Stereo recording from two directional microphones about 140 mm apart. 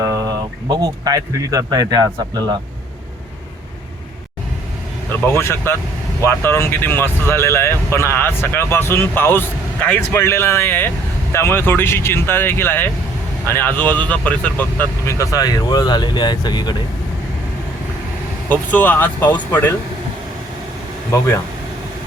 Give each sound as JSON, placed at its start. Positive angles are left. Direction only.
{"t": 0.0, "sound": "speech", "side_deg": -25}
{"t": 5.2, "sound": "speech", "side_deg": 15}
{"t": 18.4, "sound": "speech", "side_deg": 10}